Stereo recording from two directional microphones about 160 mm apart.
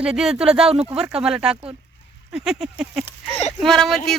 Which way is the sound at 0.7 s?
40° right (ahead or behind).